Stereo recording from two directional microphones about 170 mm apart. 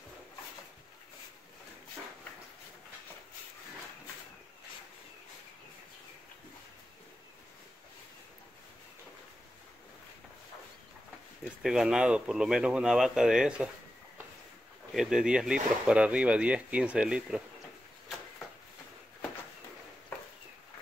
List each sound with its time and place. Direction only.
11.4 s speech: centre (ahead or behind)
15.0 s speech: 5° right (ahead or behind)